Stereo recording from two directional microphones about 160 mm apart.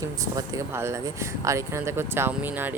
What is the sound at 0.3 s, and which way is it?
Speech, 15° right (ahead or behind).